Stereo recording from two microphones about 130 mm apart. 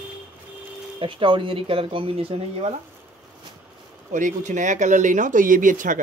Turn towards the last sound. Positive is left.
turn(degrees=-90)